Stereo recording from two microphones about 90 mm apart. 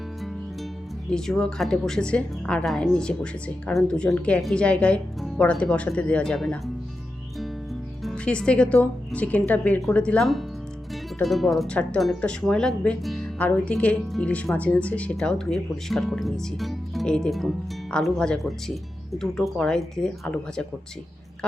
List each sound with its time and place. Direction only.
1.1 s speech: 5° left (ahead or behind)
8.1 s a woman's voice: 10° left (ahead or behind)
11.2 s speech: centre (ahead or behind)
11.7 s speech: 10° left (ahead or behind)